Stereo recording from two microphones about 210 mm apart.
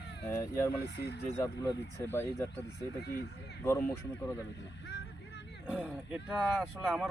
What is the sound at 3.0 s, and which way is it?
Speech, 50° left (ahead or behind).